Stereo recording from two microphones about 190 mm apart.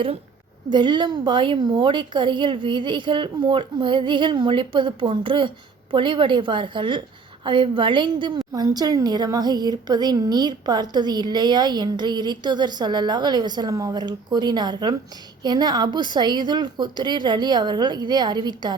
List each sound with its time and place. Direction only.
0.7 s a woman's voice: 25° right (ahead or behind)